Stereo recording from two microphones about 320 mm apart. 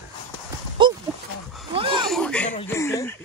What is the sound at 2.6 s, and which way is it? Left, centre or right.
Speech, centre.